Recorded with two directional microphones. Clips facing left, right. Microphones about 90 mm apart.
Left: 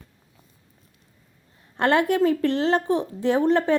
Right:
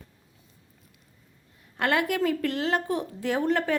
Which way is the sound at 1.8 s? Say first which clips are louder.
Left 5 dB; 30° left (ahead or behind).